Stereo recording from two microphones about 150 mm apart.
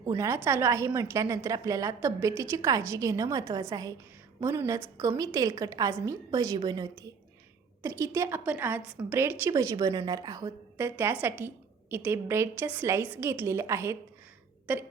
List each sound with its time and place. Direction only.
0.4 s a woman's voice: 15° right (ahead or behind)